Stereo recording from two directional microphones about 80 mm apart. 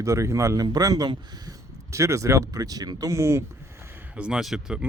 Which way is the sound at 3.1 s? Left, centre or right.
Right.